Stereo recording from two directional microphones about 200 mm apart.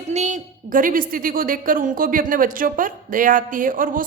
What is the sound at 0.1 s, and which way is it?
A woman's voice, 35° right (ahead or behind).